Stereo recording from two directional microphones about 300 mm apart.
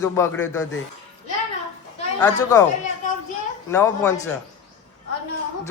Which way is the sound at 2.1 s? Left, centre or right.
Centre.